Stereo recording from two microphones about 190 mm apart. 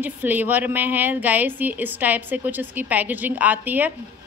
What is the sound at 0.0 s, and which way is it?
A woman's voice, 10° right (ahead or behind).